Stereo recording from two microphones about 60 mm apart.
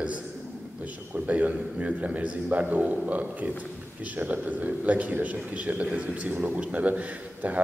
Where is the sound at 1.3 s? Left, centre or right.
Right.